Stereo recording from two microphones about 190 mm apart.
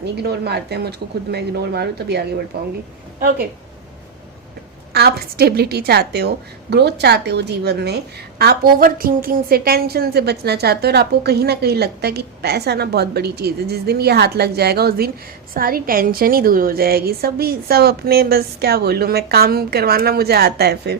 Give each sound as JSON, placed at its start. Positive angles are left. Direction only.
{"t": 0.2, "sound": "a woman's voice", "side_deg": -60}
{"t": 4.9, "sound": "a woman's voice", "side_deg": -55}